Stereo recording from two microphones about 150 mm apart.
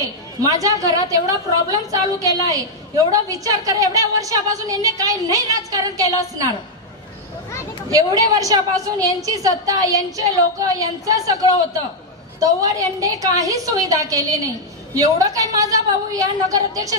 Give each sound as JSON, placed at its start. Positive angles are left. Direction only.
{"t": 0.0, "sound": "a woman's voice", "side_deg": -25}
{"t": 7.9, "sound": "a woman's voice", "side_deg": -25}